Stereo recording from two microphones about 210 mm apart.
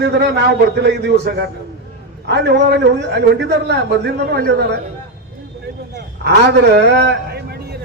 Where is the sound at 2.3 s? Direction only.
55° right (ahead or behind).